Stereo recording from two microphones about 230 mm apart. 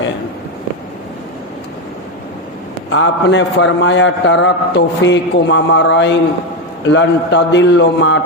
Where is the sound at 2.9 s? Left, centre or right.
Left.